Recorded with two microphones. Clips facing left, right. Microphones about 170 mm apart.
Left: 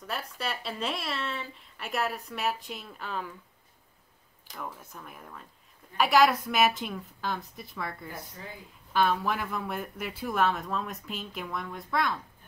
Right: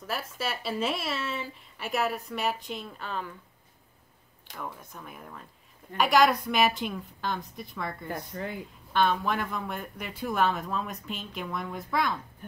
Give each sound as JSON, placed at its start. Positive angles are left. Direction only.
{"t": 0.0, "sound": "speech", "side_deg": 0}
{"t": 4.9, "sound": "speech", "side_deg": 0}
{"t": 8.1, "sound": "speech", "side_deg": -65}
{"t": 8.9, "sound": "speech", "side_deg": 5}